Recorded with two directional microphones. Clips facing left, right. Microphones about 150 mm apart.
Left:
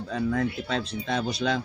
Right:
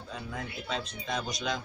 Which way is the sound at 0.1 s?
70° left (ahead or behind).